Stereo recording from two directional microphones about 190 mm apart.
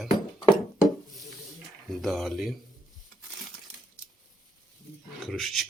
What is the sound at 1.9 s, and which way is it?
Speech, centre (ahead or behind).